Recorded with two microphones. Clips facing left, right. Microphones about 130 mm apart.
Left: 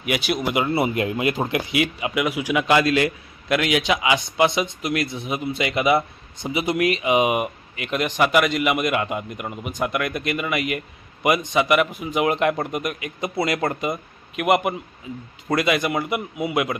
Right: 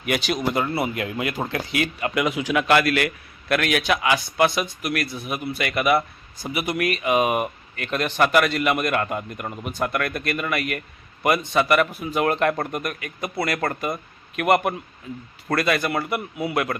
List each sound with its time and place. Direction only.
0.0 s speech: 5° left (ahead or behind)
0.8 s speech: 20° left (ahead or behind)